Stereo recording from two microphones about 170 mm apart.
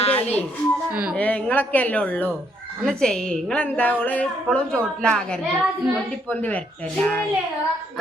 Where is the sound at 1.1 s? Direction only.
5° left (ahead or behind).